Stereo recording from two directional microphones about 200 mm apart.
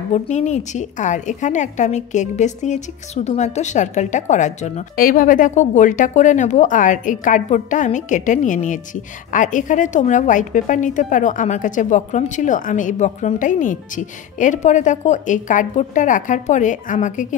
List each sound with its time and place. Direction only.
0.1 s a woman's voice: 35° left (ahead or behind)